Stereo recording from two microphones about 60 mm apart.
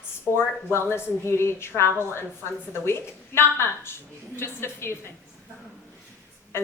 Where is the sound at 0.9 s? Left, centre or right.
Left.